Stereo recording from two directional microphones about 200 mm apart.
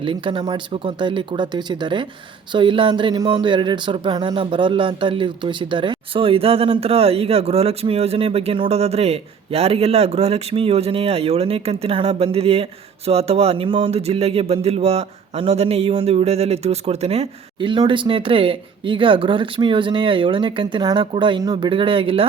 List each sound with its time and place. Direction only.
0.0 s speech: 25° right (ahead or behind)